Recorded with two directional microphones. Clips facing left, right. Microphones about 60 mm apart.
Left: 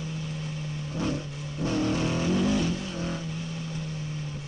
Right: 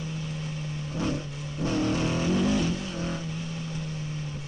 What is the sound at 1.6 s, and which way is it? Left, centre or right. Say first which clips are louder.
Vehicle: even; right.